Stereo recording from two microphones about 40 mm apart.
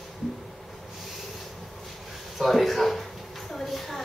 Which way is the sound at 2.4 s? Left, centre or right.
Centre.